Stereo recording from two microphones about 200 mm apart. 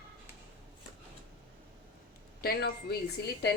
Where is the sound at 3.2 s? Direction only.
55° left (ahead or behind).